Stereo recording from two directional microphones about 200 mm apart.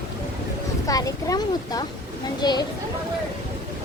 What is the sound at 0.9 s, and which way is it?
Speech, 15° left (ahead or behind).